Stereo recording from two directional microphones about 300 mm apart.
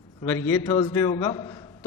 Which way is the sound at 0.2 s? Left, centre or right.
Centre.